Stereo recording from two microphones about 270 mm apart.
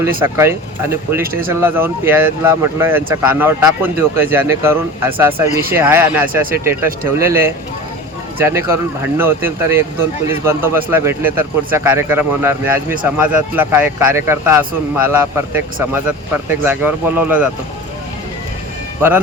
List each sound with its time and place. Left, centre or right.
0.0 s speech: centre